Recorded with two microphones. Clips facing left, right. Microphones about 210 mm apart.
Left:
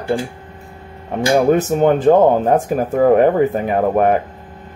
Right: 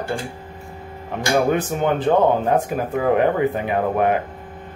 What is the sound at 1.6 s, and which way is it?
Speech, 45° left (ahead or behind).